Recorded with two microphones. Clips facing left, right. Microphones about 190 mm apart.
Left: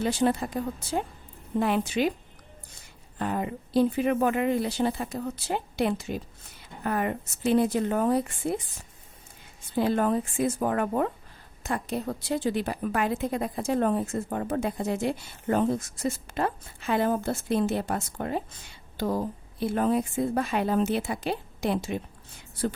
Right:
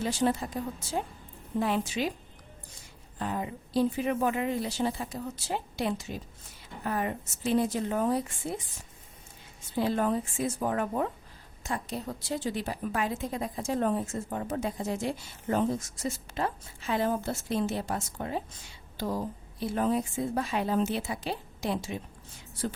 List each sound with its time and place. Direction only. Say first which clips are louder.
0.0 s a woman's voice: left 3 dB; 60° left (ahead or behind)
3.2 s a woman's voice: left 4 dB; 60° left (ahead or behind)
9.7 s a woman's voice: left 3 dB; 55° left (ahead or behind)